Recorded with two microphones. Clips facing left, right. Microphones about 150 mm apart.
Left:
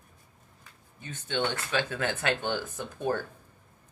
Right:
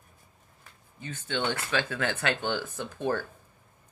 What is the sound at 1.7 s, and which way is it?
Speech, 20° left (ahead or behind).